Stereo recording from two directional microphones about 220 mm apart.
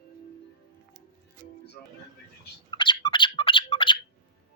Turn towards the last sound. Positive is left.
turn(degrees=20)  # may be behind; listen again after turning